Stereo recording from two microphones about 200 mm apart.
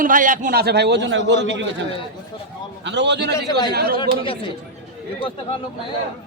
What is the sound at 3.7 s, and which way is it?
Speech, 50° right (ahead or behind).